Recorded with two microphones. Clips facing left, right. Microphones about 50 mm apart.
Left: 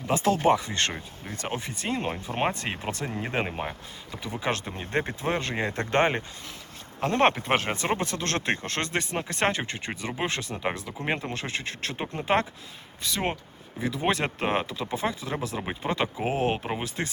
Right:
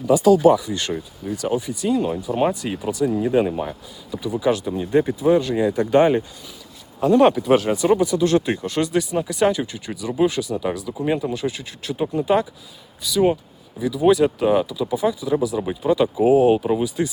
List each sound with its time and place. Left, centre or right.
0.1 s speech: left
3.4 s speech: left
4.2 s speech: left
11.3 s speech: left
15.5 s speech: left
15.8 s speech: left